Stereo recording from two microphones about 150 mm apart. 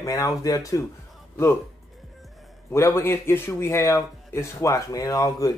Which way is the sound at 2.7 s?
15° left (ahead or behind).